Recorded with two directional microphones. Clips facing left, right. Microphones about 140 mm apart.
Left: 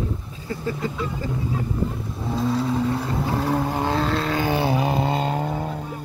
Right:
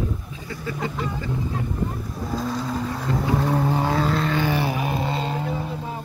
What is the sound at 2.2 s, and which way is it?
Vehicle, centre (ahead or behind).